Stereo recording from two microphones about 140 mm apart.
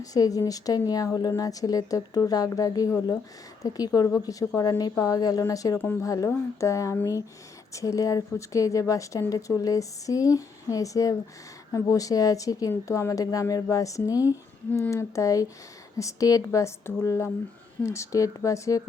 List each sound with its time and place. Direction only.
0.0 s speech: 25° left (ahead or behind)